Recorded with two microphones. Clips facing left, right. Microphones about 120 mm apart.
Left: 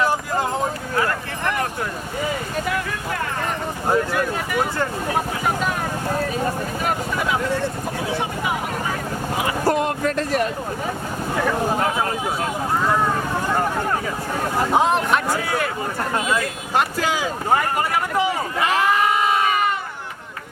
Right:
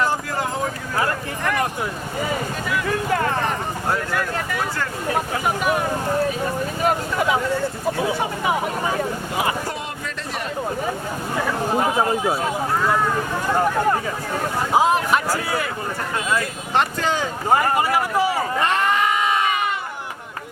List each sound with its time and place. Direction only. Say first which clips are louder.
3.8 s speech: left 4 dB; 20° left (ahead or behind)
9.6 s a sound: left 10 dB; 50° left (ahead or behind)
14.7 s speech: right 2 dB; 5° right (ahead or behind)
17.5 s speech: right 2 dB; 5° right (ahead or behind)